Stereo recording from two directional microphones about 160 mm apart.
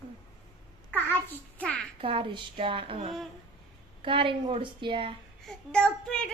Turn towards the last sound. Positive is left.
turn(degrees=5)  # may be behind; listen again after turning